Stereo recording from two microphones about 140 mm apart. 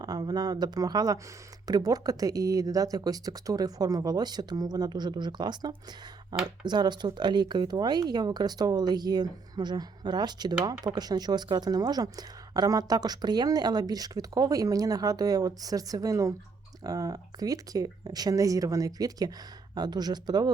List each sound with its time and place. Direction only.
0.0 s a woman's voice: 30° right (ahead or behind)